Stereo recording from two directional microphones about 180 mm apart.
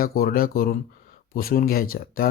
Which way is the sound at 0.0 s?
55° left (ahead or behind).